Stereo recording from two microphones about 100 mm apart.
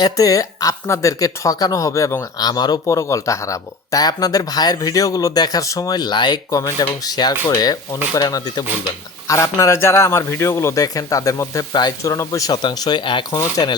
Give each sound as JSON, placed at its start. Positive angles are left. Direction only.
{"t": 0.0, "sound": "speech", "side_deg": 35}
{"t": 2.4, "sound": "speech", "side_deg": 45}
{"t": 2.8, "sound": "speech", "side_deg": 30}
{"t": 12.6, "sound": "speech", "side_deg": 45}
{"t": 13.3, "sound": "speech", "side_deg": 35}